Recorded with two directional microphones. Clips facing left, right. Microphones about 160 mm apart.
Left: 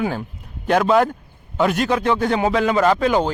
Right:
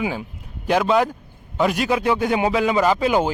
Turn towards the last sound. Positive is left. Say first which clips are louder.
# left 1 dB
turn(degrees=-5)  # may be behind; listen again after turning